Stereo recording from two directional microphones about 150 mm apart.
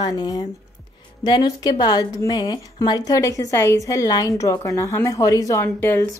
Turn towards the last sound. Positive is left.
turn(degrees=15)  # may be behind; listen again after turning